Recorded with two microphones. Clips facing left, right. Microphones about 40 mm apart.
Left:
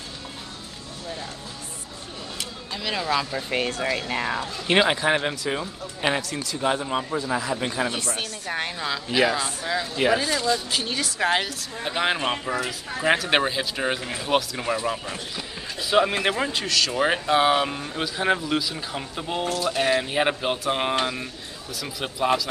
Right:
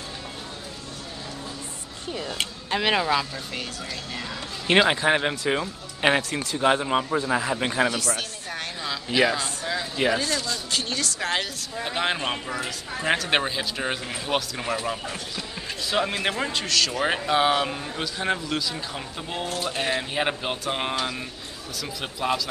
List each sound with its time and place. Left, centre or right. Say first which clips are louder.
2.3 s a sound: right 6 dB; right
3.3 s speech: left 7 dB; left
3.8 s speech: left 8 dB; left
4.6 s speech: right 1 dB; centre
5.3 s speech: right 2 dB; centre
7.9 s speech: right 1 dB; left
8.8 s speech: even; centre